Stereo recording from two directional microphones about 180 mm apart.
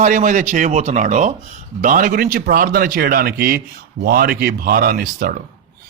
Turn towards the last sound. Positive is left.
turn(degrees=-55)  # may be behind; listen again after turning